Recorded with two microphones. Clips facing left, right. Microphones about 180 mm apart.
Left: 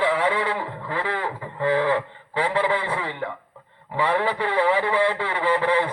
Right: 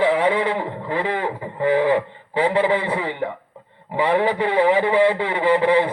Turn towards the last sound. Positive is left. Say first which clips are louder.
# right 5 dB
turn(degrees=-15)  # may be behind; listen again after turning